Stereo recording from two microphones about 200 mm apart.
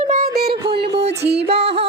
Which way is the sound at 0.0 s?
45° right (ahead or behind).